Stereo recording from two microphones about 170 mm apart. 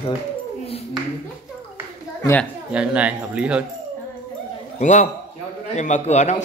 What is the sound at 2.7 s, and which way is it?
Speech, 5° right (ahead or behind).